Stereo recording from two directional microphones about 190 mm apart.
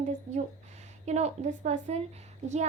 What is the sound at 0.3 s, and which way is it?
A woman's voice, 35° right (ahead or behind).